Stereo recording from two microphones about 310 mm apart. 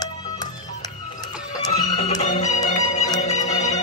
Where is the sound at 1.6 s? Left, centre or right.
Centre.